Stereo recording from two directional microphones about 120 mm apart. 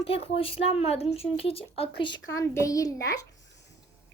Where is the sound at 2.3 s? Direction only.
25° left (ahead or behind).